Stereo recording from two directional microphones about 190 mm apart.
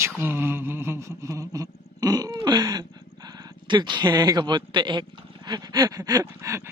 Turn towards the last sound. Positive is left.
turn(degrees=-15)  # may be behind; listen again after turning